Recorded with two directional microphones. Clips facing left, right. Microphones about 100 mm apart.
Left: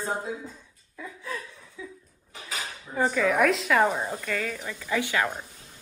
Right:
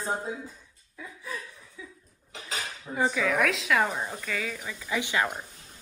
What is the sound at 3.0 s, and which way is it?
Speech, centre (ahead or behind).